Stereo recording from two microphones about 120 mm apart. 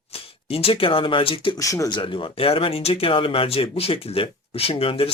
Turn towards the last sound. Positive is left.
turn(degrees=50)  # may be behind; listen again after turning